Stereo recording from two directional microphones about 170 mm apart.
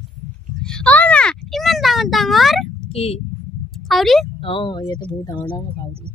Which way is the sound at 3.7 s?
Centre (ahead or behind).